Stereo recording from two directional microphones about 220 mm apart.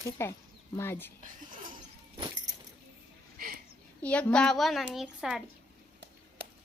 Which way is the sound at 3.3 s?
40° right (ahead or behind).